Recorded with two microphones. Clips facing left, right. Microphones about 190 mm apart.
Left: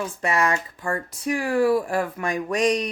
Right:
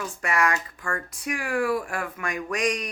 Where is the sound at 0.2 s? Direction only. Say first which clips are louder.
Left 2 dB; 25° left (ahead or behind).